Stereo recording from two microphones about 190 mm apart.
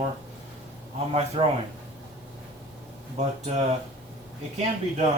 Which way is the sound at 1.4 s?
35° right (ahead or behind).